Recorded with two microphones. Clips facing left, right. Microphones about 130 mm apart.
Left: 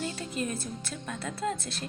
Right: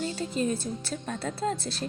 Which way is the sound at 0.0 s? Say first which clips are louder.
Right 4 dB; 30° right (ahead or behind).